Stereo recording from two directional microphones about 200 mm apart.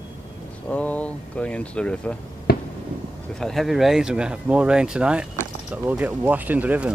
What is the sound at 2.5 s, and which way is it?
Fireworks, 50° left (ahead or behind).